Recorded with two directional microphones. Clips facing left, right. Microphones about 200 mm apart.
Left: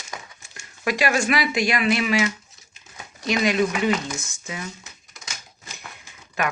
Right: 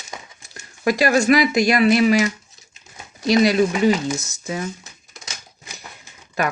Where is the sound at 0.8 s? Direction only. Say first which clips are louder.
Right 6 dB; 35° right (ahead or behind).